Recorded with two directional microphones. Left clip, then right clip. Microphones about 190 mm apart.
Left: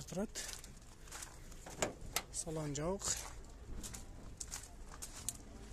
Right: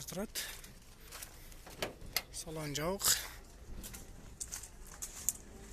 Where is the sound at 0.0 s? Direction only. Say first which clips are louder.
Right 1 dB; 20° left (ahead or behind).